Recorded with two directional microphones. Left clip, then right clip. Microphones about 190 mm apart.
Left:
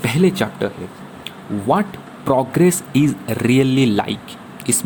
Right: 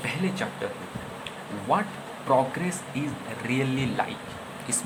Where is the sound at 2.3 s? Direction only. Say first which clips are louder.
Left 8 dB; 50° left (ahead or behind).